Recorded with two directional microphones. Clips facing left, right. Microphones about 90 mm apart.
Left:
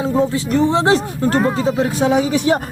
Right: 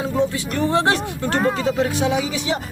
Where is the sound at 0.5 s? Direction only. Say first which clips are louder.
Left 5 dB; 20° left (ahead or behind).